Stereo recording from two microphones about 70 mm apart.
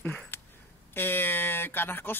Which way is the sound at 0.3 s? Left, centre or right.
Left.